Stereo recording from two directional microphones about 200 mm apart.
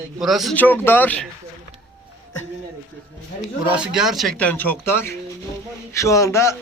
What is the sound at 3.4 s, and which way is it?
Speech, 5° right (ahead or behind).